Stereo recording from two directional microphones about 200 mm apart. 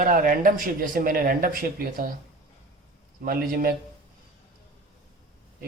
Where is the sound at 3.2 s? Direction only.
45° right (ahead or behind).